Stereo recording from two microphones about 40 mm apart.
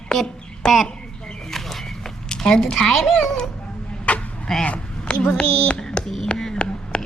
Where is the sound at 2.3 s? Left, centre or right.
Left.